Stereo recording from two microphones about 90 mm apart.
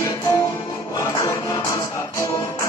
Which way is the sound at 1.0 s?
35° left (ahead or behind).